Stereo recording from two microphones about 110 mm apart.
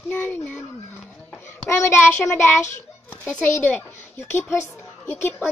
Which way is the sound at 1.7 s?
25° left (ahead or behind).